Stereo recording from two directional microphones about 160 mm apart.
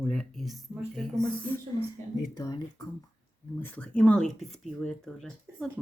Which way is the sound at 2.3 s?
20° left (ahead or behind).